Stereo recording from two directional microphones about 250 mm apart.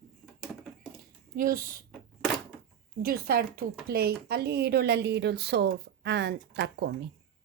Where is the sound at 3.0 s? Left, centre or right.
Right.